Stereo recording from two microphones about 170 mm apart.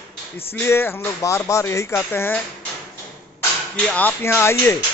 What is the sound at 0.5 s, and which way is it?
Speech, 15° left (ahead or behind).